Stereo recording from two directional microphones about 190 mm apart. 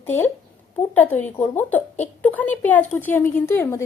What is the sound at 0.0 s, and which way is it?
A woman's voice, 10° left (ahead or behind).